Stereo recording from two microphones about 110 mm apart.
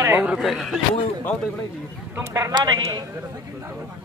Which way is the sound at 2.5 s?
40° right (ahead or behind).